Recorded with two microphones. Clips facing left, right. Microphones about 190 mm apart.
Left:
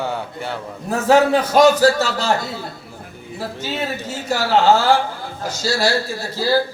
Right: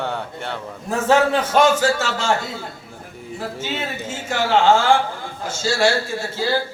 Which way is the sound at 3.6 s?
35° left (ahead or behind).